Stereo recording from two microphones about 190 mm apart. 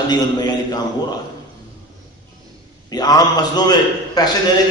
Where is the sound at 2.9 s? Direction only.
20° left (ahead or behind).